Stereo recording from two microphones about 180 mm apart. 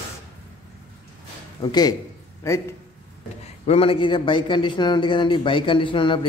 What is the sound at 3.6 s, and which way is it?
A man's voice, 35° left (ahead or behind).